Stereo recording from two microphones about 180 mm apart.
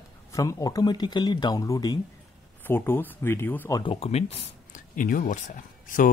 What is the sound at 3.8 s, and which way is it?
Speech, 30° left (ahead or behind).